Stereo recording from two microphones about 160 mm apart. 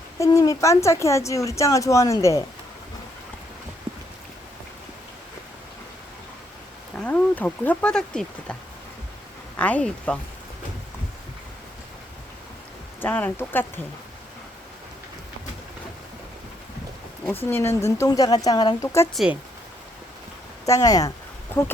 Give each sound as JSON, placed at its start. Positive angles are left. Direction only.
{"t": 0.2, "sound": "a woman's voice", "side_deg": 20}
{"t": 3.9, "sound": "boat", "side_deg": -10}
{"t": 7.0, "sound": "speech", "side_deg": 10}
{"t": 9.6, "sound": "speech", "side_deg": 10}
{"t": 13.0, "sound": "speech", "side_deg": 10}
{"t": 17.2, "sound": "a woman's voice", "side_deg": 15}
{"t": 19.1, "sound": "speech", "side_deg": -5}
{"t": 20.7, "sound": "a woman's voice", "side_deg": 20}